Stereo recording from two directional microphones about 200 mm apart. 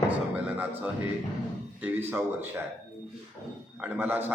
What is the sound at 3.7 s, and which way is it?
Speech, 10° right (ahead or behind).